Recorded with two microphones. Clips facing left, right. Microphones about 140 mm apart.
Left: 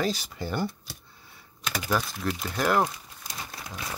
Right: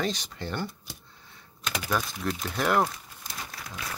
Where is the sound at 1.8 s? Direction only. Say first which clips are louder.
Left 2 dB; centre (ahead or behind).